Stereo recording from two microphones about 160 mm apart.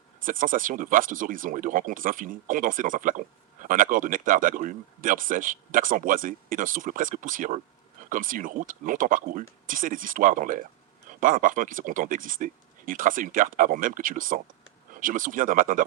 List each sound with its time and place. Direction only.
0.2 s speech: 55° right (ahead or behind)